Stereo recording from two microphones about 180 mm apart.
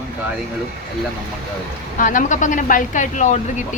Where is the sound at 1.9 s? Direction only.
45° left (ahead or behind).